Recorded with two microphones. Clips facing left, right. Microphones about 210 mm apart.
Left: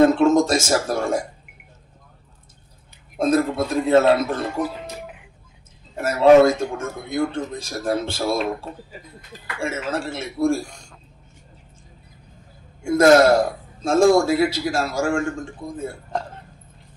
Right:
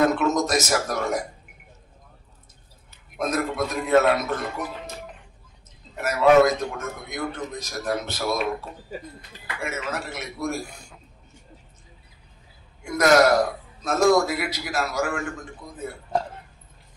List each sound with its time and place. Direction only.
0.0 s a man's voice: 30° left (ahead or behind)
3.2 s a man's voice: 30° left (ahead or behind)
4.9 s a sound: 10° left (ahead or behind)
5.9 s a man's voice: 30° left (ahead or behind)
10.6 s speech: 5° right (ahead or behind)
12.8 s a man's voice: 30° left (ahead or behind)